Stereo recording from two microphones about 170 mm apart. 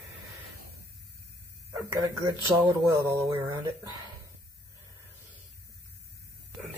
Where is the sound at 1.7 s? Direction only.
15° right (ahead or behind).